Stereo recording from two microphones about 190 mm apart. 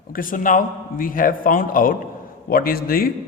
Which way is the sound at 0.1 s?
45° left (ahead or behind).